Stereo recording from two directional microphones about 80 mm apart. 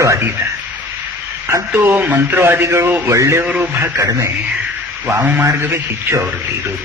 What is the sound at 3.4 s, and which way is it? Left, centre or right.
Speech, centre.